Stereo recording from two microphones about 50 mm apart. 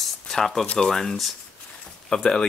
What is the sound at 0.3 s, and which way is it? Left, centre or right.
Speech, centre.